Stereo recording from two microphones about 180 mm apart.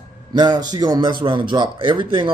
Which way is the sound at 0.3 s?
25° right (ahead or behind).